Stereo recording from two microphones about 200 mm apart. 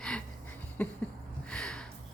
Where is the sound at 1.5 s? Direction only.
5° left (ahead or behind).